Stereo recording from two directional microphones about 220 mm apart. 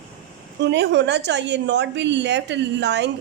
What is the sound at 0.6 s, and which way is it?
A woman's voice, 55° right (ahead or behind).